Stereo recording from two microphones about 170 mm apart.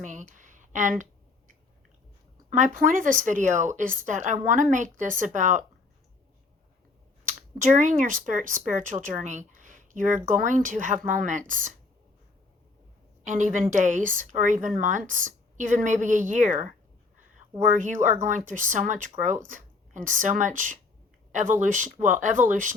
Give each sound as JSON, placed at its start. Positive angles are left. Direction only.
{"t": 0.0, "sound": "a sound", "side_deg": -45}
{"t": 2.5, "sound": "speech", "side_deg": -50}
{"t": 7.3, "sound": "speech", "side_deg": -50}
{"t": 13.2, "sound": "speech", "side_deg": -50}